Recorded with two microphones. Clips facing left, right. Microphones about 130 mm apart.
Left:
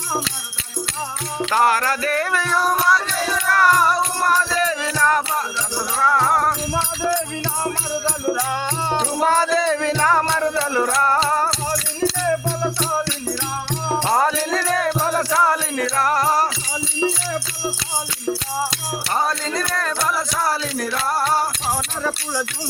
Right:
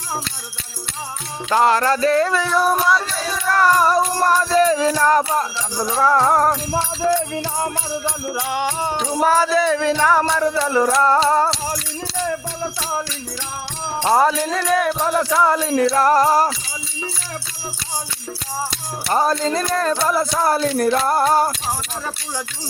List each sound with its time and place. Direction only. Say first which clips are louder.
1.5 s a sound: right 3 dB; 25° right (ahead or behind)
2.7 s music: even; 25° right (ahead or behind)
3.9 s music: right 3 dB; 40° right (ahead or behind)
5.7 s speech: right 3 dB; 20° right (ahead or behind)
8.4 s a sound: right 1 dB; 20° right (ahead or behind)
9.0 s music: right 2 dB; 10° right (ahead or behind)
10.5 s a sound: right 3 dB; 20° right (ahead or behind)
15.0 s music: right 2 dB; 10° right (ahead or behind); by 15.9 s 30° right (ahead or behind)
16.0 s speech: right 2 dB; 35° right (ahead or behind)
19.1 s speech: right 5 dB; 35° right (ahead or behind)
20.9 s music: right 1 dB; 45° right (ahead or behind)